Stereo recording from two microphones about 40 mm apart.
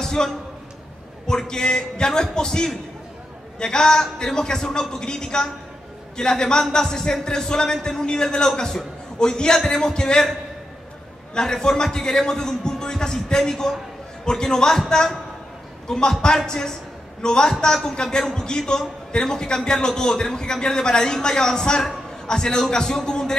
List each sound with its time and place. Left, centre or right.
0.0 s a sound: centre
1.2 s a man's voice: centre
11.3 s a man's voice: centre
15.9 s a man's voice: centre